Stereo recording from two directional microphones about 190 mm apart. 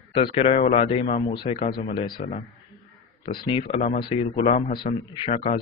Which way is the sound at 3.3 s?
30° left (ahead or behind).